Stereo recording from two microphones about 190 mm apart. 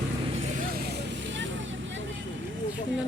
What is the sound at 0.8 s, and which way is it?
Vehicle, 60° right (ahead or behind).